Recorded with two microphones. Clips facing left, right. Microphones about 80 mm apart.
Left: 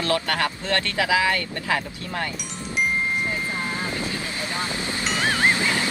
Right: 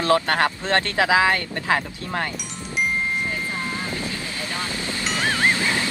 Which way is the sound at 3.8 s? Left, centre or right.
Left.